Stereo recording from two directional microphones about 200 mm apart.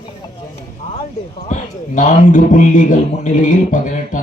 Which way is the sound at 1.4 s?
35° left (ahead or behind).